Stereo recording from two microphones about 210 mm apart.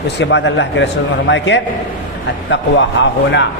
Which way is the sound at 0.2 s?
55° left (ahead or behind).